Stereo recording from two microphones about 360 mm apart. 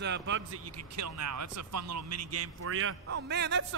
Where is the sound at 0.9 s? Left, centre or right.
Right.